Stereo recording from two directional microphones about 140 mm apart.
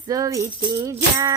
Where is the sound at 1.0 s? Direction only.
25° right (ahead or behind).